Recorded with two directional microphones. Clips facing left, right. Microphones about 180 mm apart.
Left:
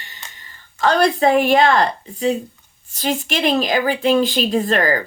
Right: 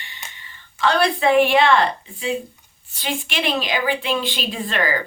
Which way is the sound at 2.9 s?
40° left (ahead or behind).